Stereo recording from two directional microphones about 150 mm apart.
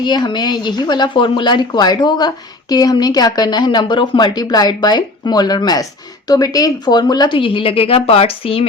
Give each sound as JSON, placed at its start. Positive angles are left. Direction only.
{"t": 0.0, "sound": "speech", "side_deg": 30}